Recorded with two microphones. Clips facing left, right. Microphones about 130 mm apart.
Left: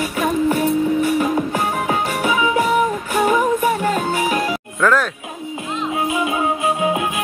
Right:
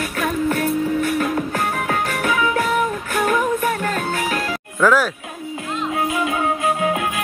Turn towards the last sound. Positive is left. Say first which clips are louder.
# left 1 dB
turn(degrees=20)  # may be behind; listen again after turning